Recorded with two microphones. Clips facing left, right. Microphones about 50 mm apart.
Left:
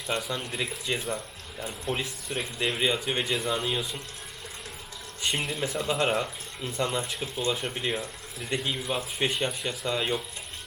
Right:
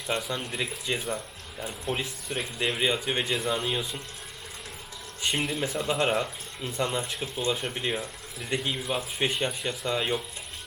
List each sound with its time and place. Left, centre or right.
0.1 s speech: centre
5.2 s speech: centre